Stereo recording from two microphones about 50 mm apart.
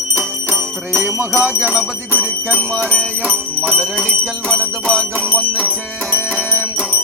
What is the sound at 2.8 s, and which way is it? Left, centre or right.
Jingle bell, centre.